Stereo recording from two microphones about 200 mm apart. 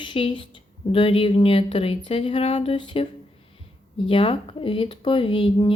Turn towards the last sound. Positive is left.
turn(degrees=25)  # may be behind; listen again after turning